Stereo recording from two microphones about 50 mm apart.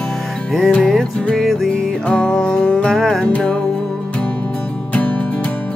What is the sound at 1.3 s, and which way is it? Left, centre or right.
Music, centre.